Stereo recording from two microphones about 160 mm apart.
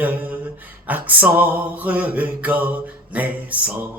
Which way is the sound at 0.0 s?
10° right (ahead or behind).